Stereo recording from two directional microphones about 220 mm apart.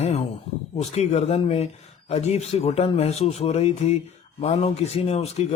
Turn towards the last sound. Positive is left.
turn(degrees=30)  # may be behind; listen again after turning